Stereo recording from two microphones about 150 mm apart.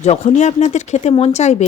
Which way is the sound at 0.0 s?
45° left (ahead or behind).